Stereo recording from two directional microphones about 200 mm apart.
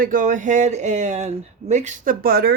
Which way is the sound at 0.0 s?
40° right (ahead or behind).